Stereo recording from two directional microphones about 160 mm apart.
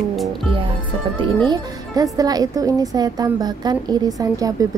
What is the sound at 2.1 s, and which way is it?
A woman's voice, 25° right (ahead or behind).